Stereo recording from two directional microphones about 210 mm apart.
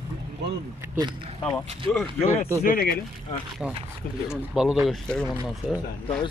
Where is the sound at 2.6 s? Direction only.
45° left (ahead or behind).